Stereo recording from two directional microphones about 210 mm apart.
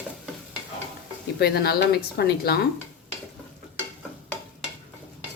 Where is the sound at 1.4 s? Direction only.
50° left (ahead or behind).